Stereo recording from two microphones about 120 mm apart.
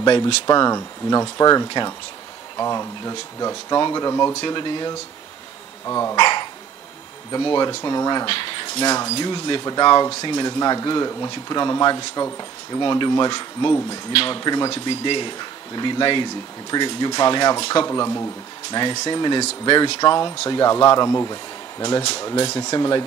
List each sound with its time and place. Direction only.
0.0 s speech: 35° left (ahead or behind)
4.5 s speech: 40° left (ahead or behind)
5.9 s speech: 25° left (ahead or behind)
6.1 s dog: 40° left (ahead or behind)
7.3 s speech: 35° left (ahead or behind)
8.3 s speech: 45° left (ahead or behind)
17.8 s speech: 25° left (ahead or behind)
18.7 s speech: 35° left (ahead or behind)